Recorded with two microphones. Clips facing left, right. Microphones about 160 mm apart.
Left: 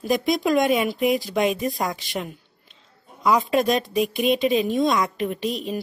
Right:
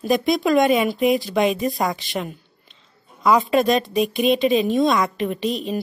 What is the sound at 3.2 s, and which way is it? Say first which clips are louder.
A woman's voice: right 3 dB; centre (ahead or behind).